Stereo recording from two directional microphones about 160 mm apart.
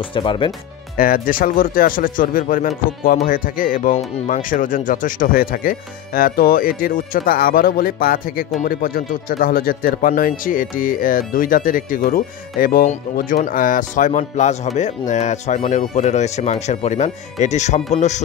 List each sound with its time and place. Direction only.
0.1 s speech: 30° left (ahead or behind)
0.9 s speech: 60° left (ahead or behind); by 18.2 s 45° left (ahead or behind)